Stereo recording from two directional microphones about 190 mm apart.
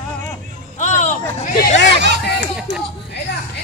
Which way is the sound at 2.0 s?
65° right (ahead or behind).